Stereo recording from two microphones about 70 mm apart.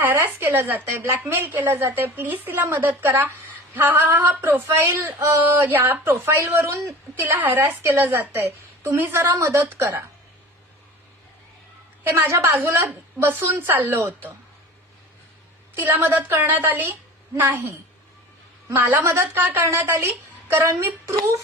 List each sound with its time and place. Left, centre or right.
0.0 s a woman's voice: right
9.0 s a woman's voice: right
9.3 s a woman's voice: right
12.0 s a woman's voice: right
15.7 s a woman's voice: right